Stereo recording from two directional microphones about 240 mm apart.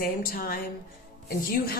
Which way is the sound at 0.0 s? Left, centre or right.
Left.